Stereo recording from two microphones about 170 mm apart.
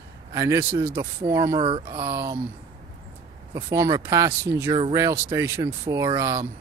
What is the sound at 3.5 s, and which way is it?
Speech, 15° right (ahead or behind).